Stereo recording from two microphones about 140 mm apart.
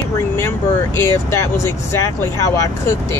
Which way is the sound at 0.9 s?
20° left (ahead or behind).